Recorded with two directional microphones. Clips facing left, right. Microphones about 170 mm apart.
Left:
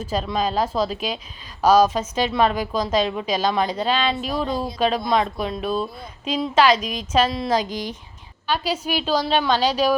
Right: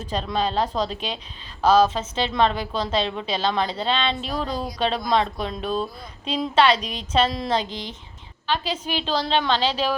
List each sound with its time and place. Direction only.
0.1 s a woman's voice: 5° left (ahead or behind)
6.7 s a woman's voice: 35° right (ahead or behind)
7.3 s speech: 5° left (ahead or behind)
7.6 s speech: 25° right (ahead or behind)
8.4 s a woman's voice: 10° left (ahead or behind)